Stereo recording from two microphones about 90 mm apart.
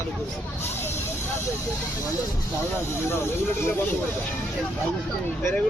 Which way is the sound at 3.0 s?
30° left (ahead or behind).